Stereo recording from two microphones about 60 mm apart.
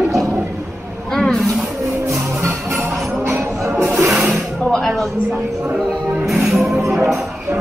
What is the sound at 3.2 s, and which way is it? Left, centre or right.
Music, right.